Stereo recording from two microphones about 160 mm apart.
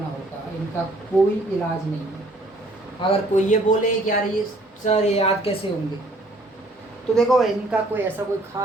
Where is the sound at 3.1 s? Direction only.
50° left (ahead or behind).